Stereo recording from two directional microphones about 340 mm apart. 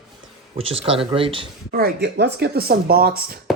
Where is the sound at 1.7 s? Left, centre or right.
Right.